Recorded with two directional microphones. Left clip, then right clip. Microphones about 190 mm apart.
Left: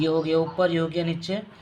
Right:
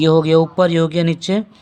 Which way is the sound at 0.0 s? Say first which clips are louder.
Right 10 dB; 40° right (ahead or behind).